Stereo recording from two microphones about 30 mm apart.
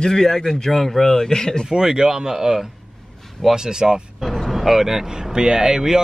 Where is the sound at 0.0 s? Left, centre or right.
Centre.